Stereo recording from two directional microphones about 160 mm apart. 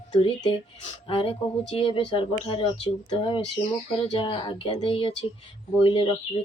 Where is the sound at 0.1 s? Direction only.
35° left (ahead or behind).